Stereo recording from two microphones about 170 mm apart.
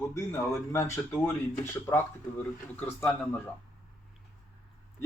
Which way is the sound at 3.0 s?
10° left (ahead or behind).